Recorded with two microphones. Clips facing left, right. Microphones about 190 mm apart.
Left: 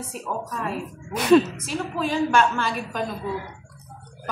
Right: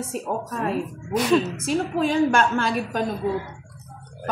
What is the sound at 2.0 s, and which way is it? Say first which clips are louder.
A woman's voice: right 1 dB; 50° right (ahead or behind).